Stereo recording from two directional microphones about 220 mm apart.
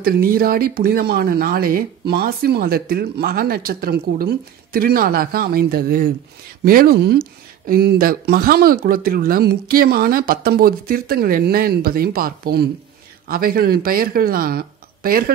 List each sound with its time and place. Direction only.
0.0 s speech: 45° right (ahead or behind)